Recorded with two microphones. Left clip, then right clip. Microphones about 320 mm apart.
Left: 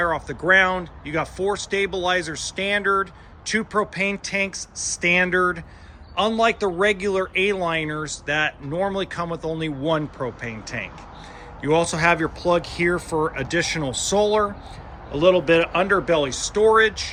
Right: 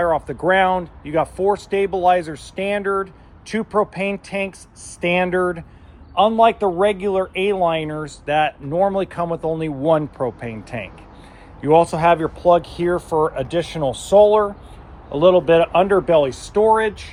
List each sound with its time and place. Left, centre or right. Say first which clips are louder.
0.0 s a man's voice: right 4 dB; centre
4.5 s speech: left 12 dB; left
4.9 s a man's voice: right 1 dB; centre